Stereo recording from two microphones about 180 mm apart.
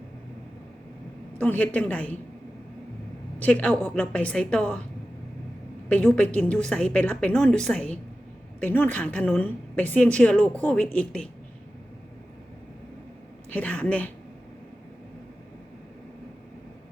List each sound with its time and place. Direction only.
1.4 s a woman's voice: 10° left (ahead or behind)
3.4 s a woman's voice: 5° left (ahead or behind)
5.9 s a woman's voice: 5° left (ahead or behind)
13.5 s a woman's voice: 5° left (ahead or behind)